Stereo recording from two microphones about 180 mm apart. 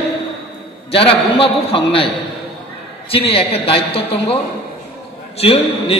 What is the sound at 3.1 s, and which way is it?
A man's voice, 30° left (ahead or behind).